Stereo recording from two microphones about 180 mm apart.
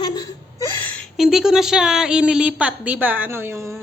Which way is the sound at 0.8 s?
Centre (ahead or behind).